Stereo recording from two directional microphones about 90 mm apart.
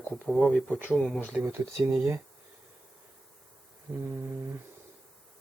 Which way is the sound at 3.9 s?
10° right (ahead or behind).